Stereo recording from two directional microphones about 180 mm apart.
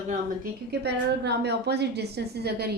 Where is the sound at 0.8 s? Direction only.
65° right (ahead or behind).